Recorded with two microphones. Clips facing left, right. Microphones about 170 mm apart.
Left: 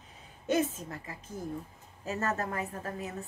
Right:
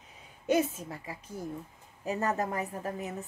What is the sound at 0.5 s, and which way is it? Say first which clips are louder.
A woman's voice: right 2 dB; 10° right (ahead or behind).